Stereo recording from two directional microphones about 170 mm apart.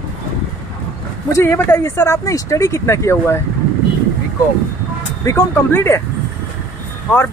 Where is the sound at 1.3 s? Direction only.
15° left (ahead or behind).